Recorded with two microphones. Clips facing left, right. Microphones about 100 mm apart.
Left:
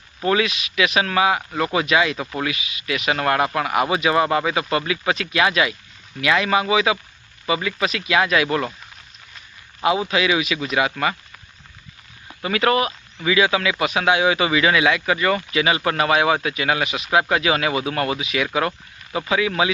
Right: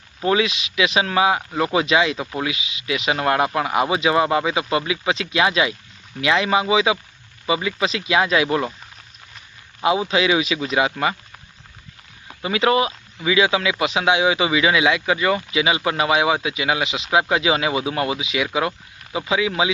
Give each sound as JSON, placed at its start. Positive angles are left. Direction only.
{"t": 0.2, "sound": "speech", "side_deg": -20}
{"t": 9.8, "sound": "speech", "side_deg": -25}
{"t": 12.4, "sound": "speech", "side_deg": -20}